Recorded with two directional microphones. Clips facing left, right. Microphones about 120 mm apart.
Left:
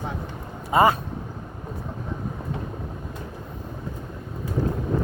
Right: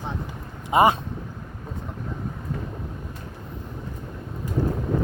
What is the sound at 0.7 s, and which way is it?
Speech, 20° right (ahead or behind).